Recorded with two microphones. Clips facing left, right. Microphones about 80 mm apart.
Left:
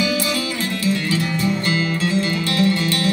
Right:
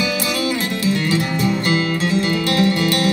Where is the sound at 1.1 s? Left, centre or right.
Centre.